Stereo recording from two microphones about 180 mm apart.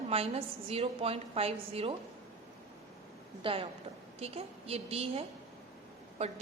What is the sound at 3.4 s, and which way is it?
A woman's voice, 30° right (ahead or behind).